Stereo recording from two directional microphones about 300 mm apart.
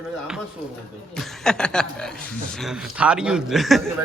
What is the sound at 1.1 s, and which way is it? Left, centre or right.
A man's voice, centre.